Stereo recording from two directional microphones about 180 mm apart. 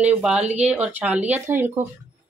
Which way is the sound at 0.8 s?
10° right (ahead or behind).